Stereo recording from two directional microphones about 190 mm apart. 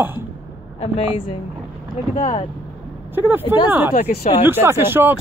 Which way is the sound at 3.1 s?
10° right (ahead or behind).